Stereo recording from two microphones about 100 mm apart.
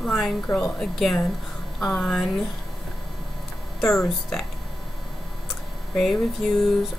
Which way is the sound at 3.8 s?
30° left (ahead or behind).